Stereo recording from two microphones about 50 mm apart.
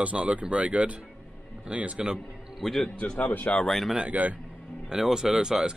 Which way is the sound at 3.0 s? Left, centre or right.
Left.